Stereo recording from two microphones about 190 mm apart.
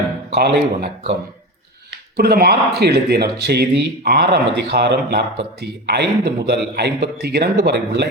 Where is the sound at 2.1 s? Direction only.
55° right (ahead or behind).